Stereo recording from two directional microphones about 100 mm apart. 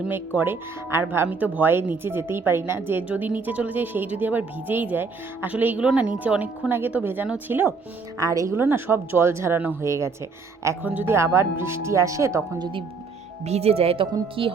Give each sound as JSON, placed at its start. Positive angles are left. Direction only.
{"t": 0.3, "sound": "a woman's voice", "side_deg": -20}
{"t": 8.2, "sound": "speech", "side_deg": -35}
{"t": 8.5, "sound": "speech", "side_deg": -25}
{"t": 10.8, "sound": "speech", "side_deg": -20}
{"t": 13.4, "sound": "speech", "side_deg": -90}